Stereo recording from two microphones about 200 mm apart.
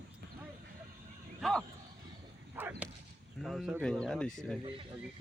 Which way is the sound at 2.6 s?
10° right (ahead or behind).